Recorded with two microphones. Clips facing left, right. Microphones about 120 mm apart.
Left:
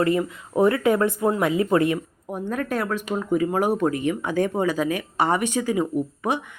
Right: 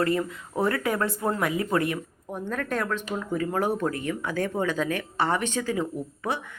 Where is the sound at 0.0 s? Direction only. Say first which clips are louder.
Left 4 dB; 20° left (ahead or behind).